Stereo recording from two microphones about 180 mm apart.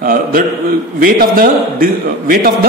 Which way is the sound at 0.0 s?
50° right (ahead or behind).